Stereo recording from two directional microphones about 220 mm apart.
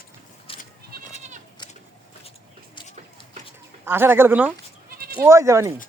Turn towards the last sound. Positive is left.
turn(degrees=-15)  # may be behind; listen again after turning